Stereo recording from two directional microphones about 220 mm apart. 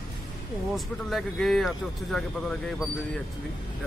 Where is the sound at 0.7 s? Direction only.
Centre (ahead or behind).